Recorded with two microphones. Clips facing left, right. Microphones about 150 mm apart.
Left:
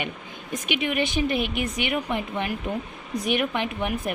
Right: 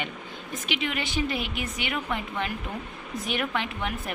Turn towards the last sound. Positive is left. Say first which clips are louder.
# left 5 dB
turn(degrees=15)  # may be behind; listen again after turning